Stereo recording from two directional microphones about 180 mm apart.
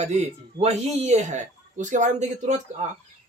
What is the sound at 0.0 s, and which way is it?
Speech, 40° right (ahead or behind).